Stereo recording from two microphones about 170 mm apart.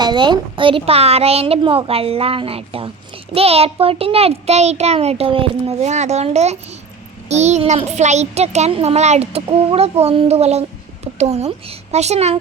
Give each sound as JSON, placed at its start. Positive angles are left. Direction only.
{"t": 0.0, "sound": "a child's voice", "side_deg": -25}